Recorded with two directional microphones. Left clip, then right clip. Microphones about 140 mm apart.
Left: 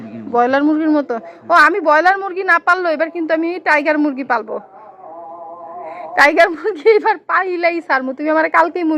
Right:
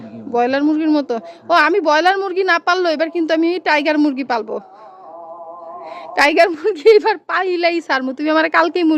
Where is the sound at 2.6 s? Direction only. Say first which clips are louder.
Left 1 dB; 60° right (ahead or behind).